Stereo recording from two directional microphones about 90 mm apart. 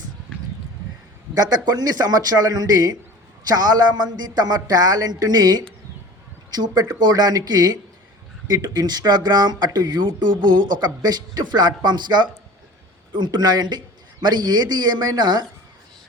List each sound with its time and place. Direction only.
1.4 s speech: 45° right (ahead or behind)